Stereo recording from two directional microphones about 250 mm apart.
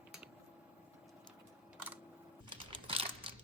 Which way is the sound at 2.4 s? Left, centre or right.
Centre.